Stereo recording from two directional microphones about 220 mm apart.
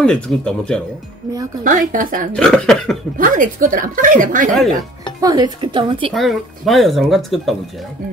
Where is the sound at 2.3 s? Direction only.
5° left (ahead or behind).